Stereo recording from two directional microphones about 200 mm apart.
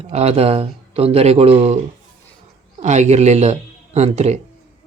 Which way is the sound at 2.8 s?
35° right (ahead or behind).